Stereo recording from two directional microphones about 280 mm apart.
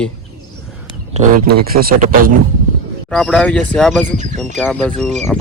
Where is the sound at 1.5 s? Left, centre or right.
Right.